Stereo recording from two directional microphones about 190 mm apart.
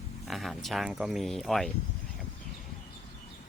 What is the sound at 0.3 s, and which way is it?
Speech, centre (ahead or behind).